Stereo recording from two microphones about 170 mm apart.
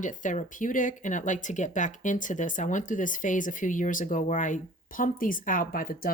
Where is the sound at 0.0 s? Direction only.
50° left (ahead or behind).